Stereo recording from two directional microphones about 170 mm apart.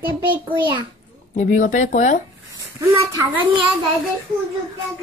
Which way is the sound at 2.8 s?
15° right (ahead or behind).